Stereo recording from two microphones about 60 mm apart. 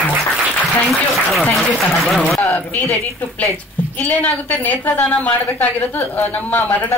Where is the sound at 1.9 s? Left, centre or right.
Centre.